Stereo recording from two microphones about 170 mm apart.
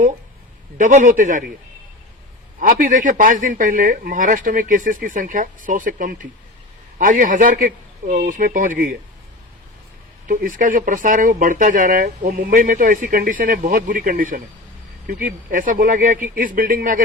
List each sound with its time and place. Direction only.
0.8 s speech: 50° right (ahead or behind)
2.6 s speech: 50° right (ahead or behind)
10.2 s speech: 55° right (ahead or behind)